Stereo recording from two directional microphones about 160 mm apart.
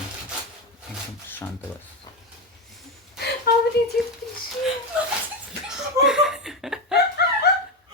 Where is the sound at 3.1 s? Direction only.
85° left.